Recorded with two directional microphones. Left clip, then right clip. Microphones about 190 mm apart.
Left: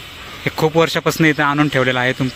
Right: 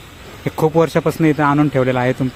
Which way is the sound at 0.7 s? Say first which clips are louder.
Even; 10° right (ahead or behind).